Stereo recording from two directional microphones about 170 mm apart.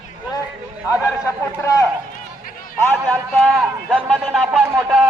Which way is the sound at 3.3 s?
Centre (ahead or behind).